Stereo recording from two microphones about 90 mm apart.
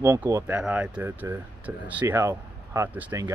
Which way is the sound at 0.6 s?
15° right (ahead or behind).